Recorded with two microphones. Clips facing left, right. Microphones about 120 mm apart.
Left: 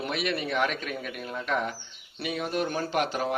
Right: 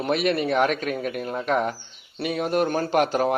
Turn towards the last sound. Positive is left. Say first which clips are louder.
# right 7 dB
turn(degrees=-45)  # may be behind; listen again after turning